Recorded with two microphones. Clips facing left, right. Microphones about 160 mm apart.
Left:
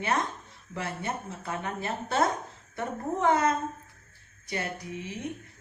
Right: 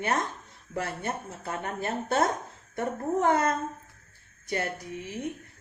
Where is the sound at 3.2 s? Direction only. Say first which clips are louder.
Left 2 dB; 50° right (ahead or behind).